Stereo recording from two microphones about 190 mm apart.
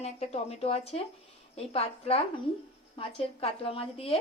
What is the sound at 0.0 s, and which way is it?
A woman's voice, 35° left (ahead or behind).